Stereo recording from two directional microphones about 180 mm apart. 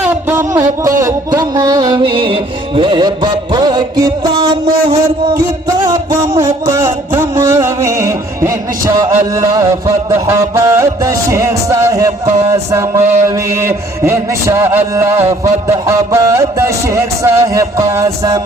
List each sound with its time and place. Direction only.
0.1 s music: 15° right (ahead or behind)
12.7 s mantra: 15° right (ahead or behind)
13.2 s a sound: 15° right (ahead or behind)